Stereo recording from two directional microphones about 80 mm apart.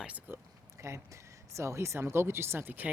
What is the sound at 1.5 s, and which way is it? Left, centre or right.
Speech, right.